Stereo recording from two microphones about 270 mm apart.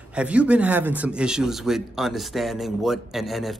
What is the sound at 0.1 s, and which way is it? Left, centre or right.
Speech, centre.